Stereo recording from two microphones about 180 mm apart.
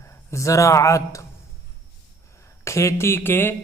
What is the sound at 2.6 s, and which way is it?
Speech, 15° left (ahead or behind).